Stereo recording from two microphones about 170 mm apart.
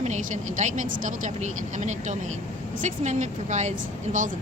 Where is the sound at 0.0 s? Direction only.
45° right (ahead or behind).